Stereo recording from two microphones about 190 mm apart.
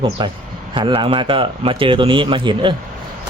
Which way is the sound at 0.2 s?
25° right (ahead or behind).